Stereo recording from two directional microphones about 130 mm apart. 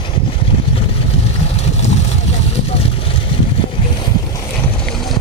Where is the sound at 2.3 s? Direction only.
50° left (ahead or behind).